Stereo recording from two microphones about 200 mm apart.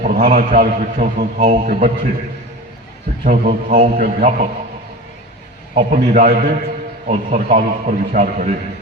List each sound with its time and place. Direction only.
0.0 s a man's voice: 45° right (ahead or behind)
3.2 s a man's voice: 40° right (ahead or behind)
5.7 s a man's voice: 45° right (ahead or behind)